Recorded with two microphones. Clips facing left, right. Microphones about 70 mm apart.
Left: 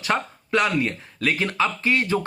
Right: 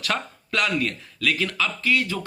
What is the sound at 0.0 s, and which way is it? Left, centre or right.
Speech, left.